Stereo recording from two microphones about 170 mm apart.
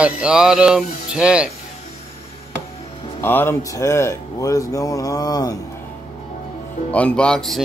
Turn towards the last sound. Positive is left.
turn(degrees=5)  # may be behind; listen again after turning